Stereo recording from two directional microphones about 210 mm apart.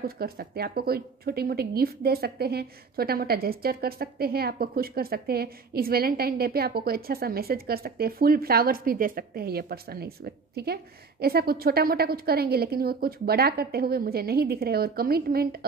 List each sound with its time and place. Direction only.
0.0 s speech: 45° right (ahead or behind)